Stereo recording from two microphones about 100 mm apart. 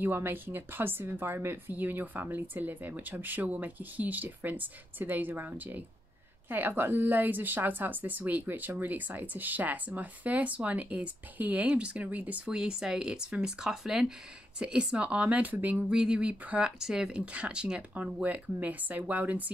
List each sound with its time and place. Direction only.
0.0 s a woman's voice: 20° right (ahead or behind)